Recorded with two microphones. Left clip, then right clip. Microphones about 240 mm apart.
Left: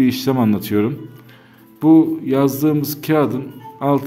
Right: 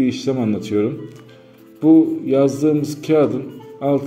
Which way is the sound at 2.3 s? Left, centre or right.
Left.